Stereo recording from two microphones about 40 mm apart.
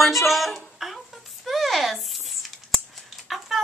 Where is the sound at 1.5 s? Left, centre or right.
Centre.